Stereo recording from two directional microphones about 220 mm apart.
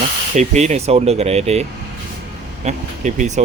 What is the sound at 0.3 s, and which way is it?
Speech, 30° right (ahead or behind).